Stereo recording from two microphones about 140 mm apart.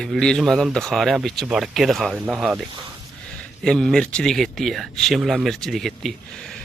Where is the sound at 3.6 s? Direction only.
5° left (ahead or behind).